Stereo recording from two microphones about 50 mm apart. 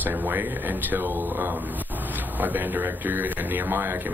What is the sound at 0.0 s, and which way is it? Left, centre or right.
Speech, right.